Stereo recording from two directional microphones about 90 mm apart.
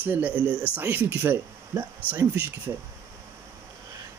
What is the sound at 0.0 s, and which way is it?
Speech, 20° right (ahead or behind).